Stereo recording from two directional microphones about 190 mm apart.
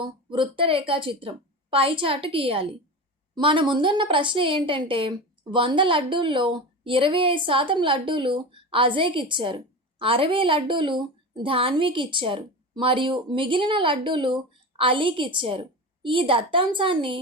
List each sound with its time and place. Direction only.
0.0 s a woman's voice: 25° right (ahead or behind)